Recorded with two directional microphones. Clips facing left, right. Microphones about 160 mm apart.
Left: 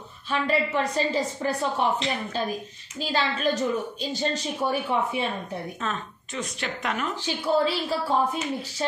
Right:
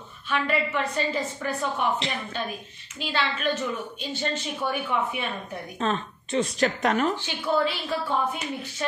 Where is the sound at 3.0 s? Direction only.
40° left (ahead or behind).